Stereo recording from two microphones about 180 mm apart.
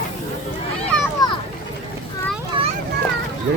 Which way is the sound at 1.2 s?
20° left (ahead or behind).